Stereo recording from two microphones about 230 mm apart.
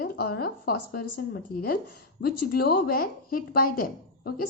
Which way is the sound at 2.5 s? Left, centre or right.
Left.